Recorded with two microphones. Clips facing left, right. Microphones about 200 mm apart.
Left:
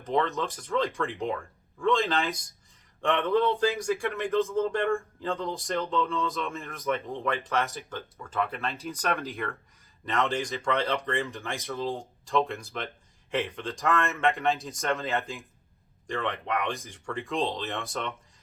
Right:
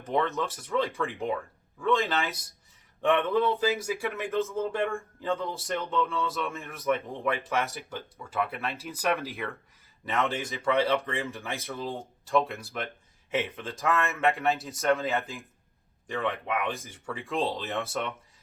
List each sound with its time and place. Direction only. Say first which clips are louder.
0.1 s speech: left 1 dB; centre (ahead or behind)